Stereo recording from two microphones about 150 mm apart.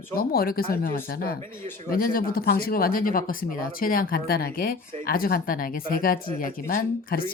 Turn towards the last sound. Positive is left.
turn(degrees=75)  # may be behind; listen again after turning